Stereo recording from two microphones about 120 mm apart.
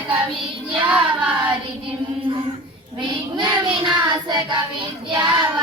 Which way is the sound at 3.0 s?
40° right (ahead or behind).